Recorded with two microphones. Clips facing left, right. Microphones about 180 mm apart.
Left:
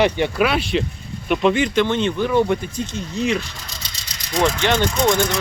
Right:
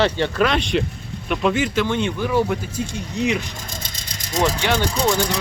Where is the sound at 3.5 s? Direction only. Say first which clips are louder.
Right 4 dB; 50° right (ahead or behind).